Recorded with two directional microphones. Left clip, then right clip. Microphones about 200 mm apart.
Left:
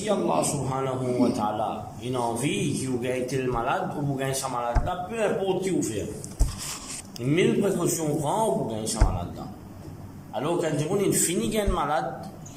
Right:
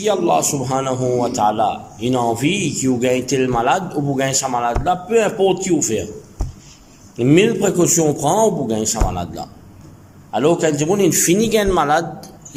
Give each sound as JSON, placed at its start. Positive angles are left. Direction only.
{"t": 0.0, "sound": "a man's voice", "side_deg": -55}
{"t": 7.2, "sound": "a man's voice", "side_deg": -55}